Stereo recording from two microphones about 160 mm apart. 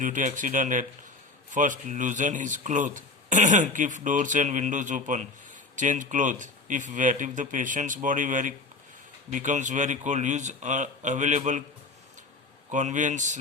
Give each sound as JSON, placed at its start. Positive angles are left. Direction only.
{"t": 0.0, "sound": "speech", "side_deg": -55}
{"t": 12.7, "sound": "speech", "side_deg": -50}